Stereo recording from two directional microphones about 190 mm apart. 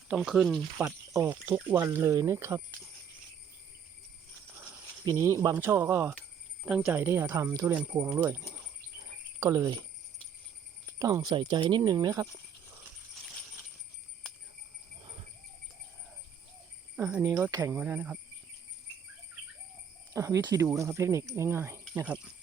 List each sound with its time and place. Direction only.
0.1 s speech: centre (ahead or behind)
0.8 s speech: 10° right (ahead or behind)
5.0 s speech: 15° right (ahead or behind)
10.8 s speech: 20° right (ahead or behind)
15.0 s clip-clop: 25° right (ahead or behind)
17.3 s speech: 15° right (ahead or behind)
20.1 s speech: 15° right (ahead or behind)